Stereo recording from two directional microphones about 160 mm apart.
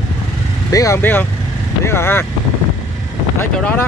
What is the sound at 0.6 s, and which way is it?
Speech, 20° left (ahead or behind).